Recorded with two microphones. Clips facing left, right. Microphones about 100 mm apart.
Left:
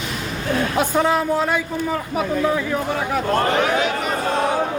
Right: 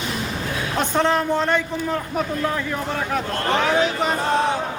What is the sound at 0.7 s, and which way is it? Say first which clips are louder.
A man's voice: even; 10° left (ahead or behind).